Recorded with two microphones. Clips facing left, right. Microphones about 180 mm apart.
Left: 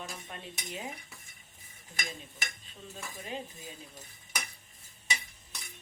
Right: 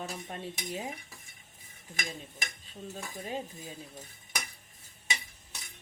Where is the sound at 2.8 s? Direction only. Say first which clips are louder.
Right 4 dB; 40° right (ahead or behind).